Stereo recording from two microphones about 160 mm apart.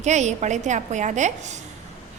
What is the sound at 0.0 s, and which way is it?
A woman's voice, 45° right (ahead or behind).